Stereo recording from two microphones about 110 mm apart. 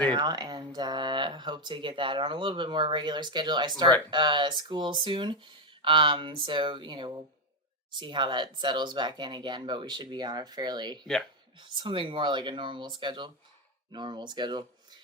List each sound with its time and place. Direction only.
0.1 s speech: 40° right (ahead or behind)
11.0 s speech: 5° left (ahead or behind)
11.7 s speech: 50° right (ahead or behind)